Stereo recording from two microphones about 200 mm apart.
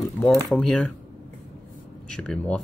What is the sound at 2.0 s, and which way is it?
Speech, 5° left (ahead or behind).